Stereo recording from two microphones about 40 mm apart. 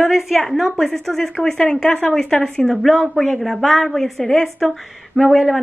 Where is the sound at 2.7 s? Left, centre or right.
Centre.